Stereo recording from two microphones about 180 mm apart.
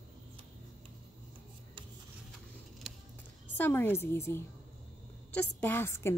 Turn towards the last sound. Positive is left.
turn(degrees=15)  # may be behind; listen again after turning